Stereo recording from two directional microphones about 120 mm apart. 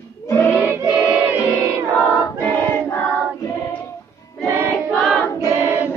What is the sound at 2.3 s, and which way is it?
Choir, 15° left (ahead or behind).